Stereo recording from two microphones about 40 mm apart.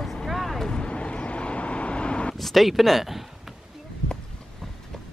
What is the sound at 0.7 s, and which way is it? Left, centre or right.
Vehicle, left.